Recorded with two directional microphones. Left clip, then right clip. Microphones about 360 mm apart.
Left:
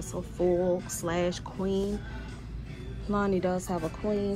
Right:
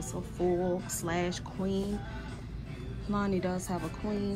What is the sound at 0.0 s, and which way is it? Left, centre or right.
Music, centre.